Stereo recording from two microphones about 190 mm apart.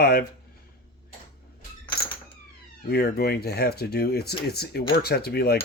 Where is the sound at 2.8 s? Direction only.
55° left (ahead or behind).